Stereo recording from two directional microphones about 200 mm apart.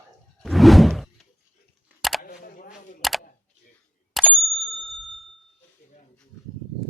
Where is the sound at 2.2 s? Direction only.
45° left (ahead or behind).